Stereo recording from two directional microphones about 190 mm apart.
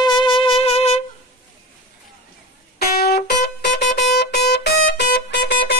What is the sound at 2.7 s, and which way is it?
Music, 55° left (ahead or behind).